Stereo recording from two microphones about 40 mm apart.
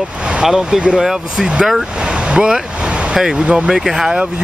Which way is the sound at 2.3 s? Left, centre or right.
Right.